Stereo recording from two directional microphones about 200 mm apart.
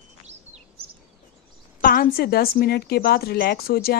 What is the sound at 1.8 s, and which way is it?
A woman's voice, 45° left (ahead or behind).